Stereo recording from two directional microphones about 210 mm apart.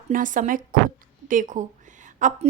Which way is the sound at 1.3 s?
40° right (ahead or behind).